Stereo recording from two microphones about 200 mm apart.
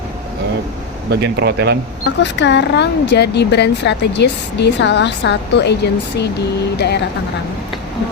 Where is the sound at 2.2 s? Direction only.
60° left (ahead or behind).